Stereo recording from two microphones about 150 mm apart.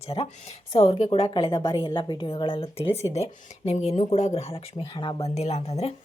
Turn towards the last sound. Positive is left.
turn(degrees=45)  # may be behind; listen again after turning